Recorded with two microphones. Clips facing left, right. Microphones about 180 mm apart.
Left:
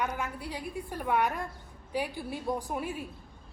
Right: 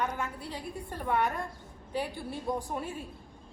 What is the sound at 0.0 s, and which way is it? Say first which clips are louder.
A woman's voice: even; 15° left (ahead or behind).